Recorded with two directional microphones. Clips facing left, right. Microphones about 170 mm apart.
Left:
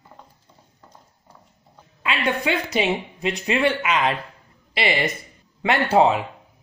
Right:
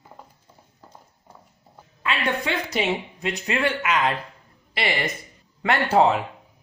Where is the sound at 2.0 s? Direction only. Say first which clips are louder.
Left 2 dB; 20° left (ahead or behind).